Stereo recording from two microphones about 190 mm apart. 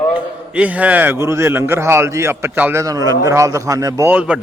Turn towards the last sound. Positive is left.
turn(degrees=-5)  # may be behind; listen again after turning